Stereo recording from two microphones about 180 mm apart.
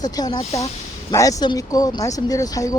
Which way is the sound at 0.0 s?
20° left (ahead or behind).